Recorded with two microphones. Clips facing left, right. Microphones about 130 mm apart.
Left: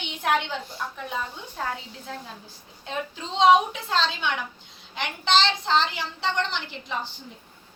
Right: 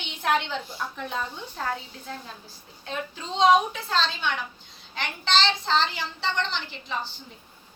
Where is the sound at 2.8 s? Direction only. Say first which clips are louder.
Left 1 dB; 20° left (ahead or behind).